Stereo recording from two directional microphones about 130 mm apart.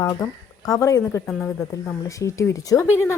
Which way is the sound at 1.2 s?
5° left (ahead or behind).